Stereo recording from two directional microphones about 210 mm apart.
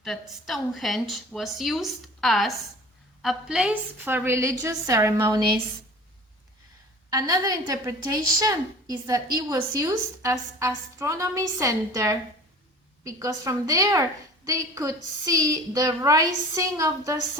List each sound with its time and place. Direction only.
0.0 s a woman's voice: centre (ahead or behind); by 5.4 s 15° right (ahead or behind)
7.1 s a woman's voice: 15° right (ahead or behind)